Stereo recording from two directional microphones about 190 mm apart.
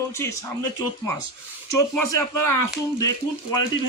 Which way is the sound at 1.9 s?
15° left (ahead or behind).